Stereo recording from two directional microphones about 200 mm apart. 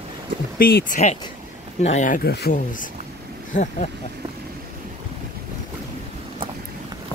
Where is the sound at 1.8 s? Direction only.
35° left (ahead or behind).